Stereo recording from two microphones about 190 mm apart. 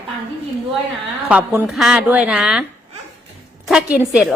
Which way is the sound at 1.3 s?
5° right (ahead or behind).